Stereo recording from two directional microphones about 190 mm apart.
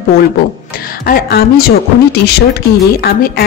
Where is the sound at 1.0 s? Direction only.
50° left (ahead or behind).